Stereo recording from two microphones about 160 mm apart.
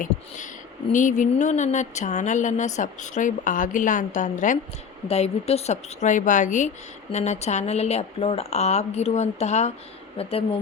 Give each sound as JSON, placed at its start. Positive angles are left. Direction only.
{"t": 0.9, "sound": "speech", "side_deg": 50}
{"t": 5.0, "sound": "speech", "side_deg": 40}